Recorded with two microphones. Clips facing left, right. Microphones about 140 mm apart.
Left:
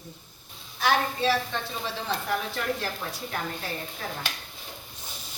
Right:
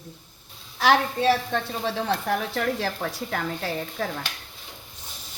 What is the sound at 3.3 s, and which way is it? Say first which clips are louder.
Speech: right 4 dB; 90° right.